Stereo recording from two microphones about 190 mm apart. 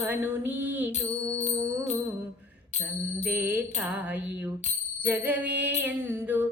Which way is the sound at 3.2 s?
10° right (ahead or behind).